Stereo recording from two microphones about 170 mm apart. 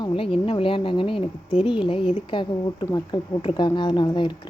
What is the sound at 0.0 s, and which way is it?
Speech, 30° left (ahead or behind).